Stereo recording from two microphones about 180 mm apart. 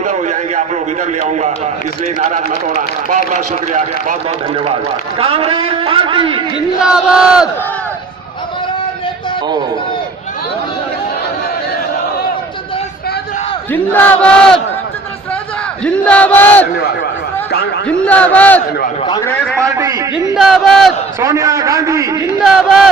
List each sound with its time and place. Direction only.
0.0 s a sound: 40° right (ahead or behind)
1.3 s a man's voice: 40° right (ahead or behind)
4.5 s a man's voice: 30° right (ahead or behind)
6.8 s battle cry: 5° right (ahead or behind)
13.9 s a sound: 10° left (ahead or behind)
15.8 s a sound: 5° left (ahead or behind)
17.8 s a sound: 5° left (ahead or behind)
19.0 s a man's voice: 20° left (ahead or behind)
19.5 s a man's voice: 15° right (ahead or behind)
20.3 s battle cry: centre (ahead or behind)
21.2 s a man's voice: 15° right (ahead or behind)
22.5 s battle cry: centre (ahead or behind)